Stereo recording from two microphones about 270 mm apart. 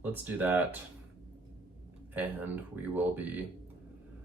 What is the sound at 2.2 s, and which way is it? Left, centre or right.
Speech, centre.